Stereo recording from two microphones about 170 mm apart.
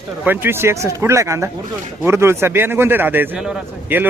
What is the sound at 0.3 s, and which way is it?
A man's voice, 15° right (ahead or behind).